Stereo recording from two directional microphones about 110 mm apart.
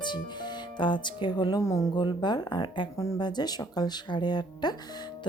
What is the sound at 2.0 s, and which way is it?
Speech, 45° left (ahead or behind).